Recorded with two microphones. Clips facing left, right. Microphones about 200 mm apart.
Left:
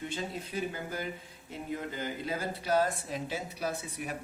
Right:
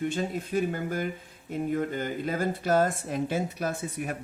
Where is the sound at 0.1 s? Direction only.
50° right (ahead or behind).